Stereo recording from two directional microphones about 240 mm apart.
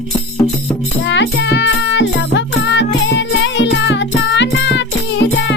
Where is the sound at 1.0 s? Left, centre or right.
Left.